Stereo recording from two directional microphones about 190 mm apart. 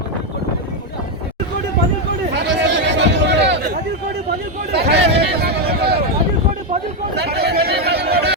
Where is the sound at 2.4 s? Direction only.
65° right (ahead or behind).